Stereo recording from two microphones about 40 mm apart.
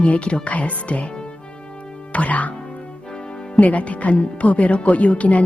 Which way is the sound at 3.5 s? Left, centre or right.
Left.